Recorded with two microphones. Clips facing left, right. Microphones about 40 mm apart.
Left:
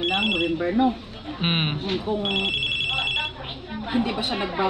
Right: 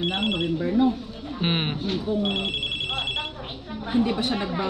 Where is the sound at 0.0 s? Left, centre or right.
Left.